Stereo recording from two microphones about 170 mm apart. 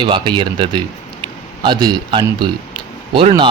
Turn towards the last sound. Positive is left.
turn(degrees=-30)  # may be behind; listen again after turning